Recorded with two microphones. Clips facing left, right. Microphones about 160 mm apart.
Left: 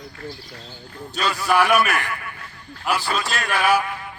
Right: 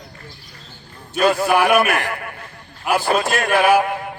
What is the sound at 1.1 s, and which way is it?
Speech, 50° right (ahead or behind).